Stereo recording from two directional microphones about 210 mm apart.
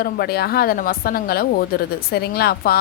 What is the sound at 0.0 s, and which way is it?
A woman's voice, 50° left (ahead or behind).